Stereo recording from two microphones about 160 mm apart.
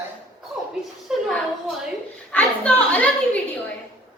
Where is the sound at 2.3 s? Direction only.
10° left (ahead or behind).